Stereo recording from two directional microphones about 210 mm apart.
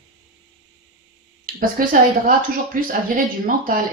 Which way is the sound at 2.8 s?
40° right (ahead or behind).